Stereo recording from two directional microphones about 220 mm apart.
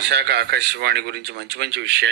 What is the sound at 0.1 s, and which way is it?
Speech, 50° right (ahead or behind).